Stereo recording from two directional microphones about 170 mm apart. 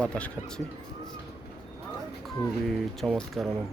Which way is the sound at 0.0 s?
5° left (ahead or behind).